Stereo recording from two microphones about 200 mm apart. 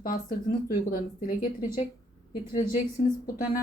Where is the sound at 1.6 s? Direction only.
40° left (ahead or behind).